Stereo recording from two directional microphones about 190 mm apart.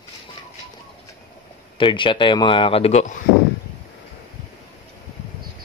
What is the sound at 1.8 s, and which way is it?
Speech, 25° left (ahead or behind).